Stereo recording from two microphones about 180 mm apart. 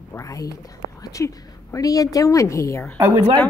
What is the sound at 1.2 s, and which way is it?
A woman's voice, 15° left (ahead or behind).